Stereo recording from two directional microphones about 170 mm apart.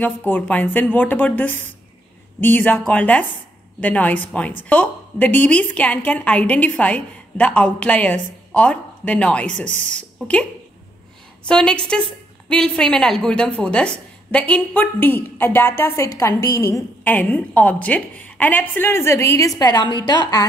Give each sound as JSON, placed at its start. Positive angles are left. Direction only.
{"t": 0.0, "sound": "a woman's voice", "side_deg": 10}
{"t": 11.4, "sound": "a woman's voice", "side_deg": 5}